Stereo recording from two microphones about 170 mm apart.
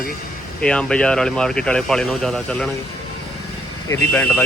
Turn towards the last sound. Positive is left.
turn(degrees=10)  # may be behind; listen again after turning